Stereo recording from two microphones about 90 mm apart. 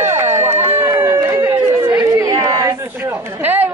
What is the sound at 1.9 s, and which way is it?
Chatter, 40° right (ahead or behind).